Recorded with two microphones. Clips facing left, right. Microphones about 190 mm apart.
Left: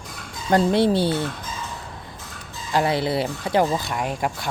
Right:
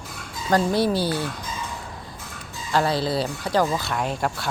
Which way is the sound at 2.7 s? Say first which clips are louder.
Left 1 dB; 20° left (ahead or behind).